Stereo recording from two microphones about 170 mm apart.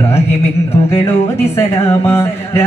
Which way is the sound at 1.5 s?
15° left (ahead or behind).